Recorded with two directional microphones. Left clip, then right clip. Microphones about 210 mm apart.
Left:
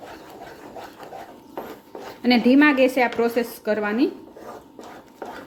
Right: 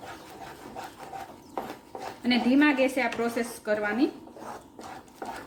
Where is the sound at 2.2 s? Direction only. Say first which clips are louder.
Left 7 dB; 40° left (ahead or behind).